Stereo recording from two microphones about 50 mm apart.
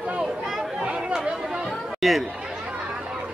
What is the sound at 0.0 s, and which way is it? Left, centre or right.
Speech, right.